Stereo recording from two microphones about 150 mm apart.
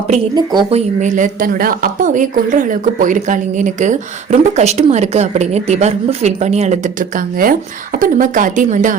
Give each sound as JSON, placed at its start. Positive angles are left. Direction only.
{"t": 0.7, "sound": "speech", "side_deg": -55}